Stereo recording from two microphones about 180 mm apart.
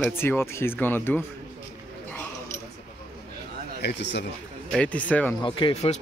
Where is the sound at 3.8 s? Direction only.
70° left (ahead or behind).